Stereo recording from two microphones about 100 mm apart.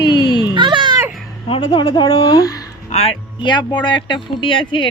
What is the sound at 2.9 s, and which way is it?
Speech, 90° left.